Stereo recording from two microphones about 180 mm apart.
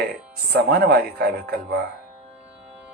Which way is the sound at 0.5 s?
60° right (ahead or behind).